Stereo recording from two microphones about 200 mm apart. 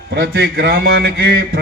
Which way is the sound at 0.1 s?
55° right (ahead or behind).